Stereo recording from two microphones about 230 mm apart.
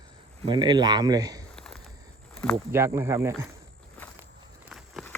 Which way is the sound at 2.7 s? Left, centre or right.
Centre.